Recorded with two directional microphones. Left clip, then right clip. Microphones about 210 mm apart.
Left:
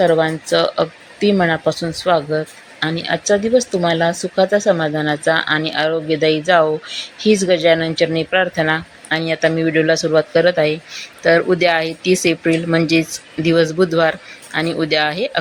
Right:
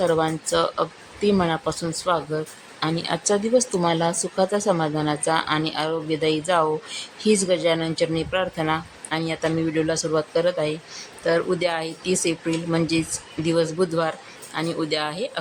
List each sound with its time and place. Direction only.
0.0 s speech: 10° left (ahead or behind)